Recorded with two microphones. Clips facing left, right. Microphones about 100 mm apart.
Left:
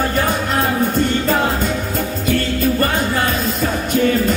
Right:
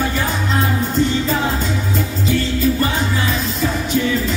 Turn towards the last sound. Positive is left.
turn(degrees=50)  # may be behind; listen again after turning